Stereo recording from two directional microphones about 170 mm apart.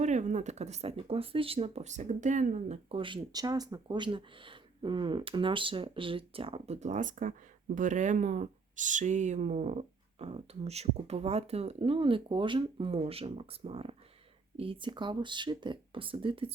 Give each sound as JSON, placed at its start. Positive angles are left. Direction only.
{"t": 0.0, "sound": "speech", "side_deg": -45}